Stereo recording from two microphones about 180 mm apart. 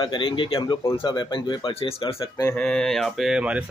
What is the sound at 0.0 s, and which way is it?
A man's voice, 25° left (ahead or behind).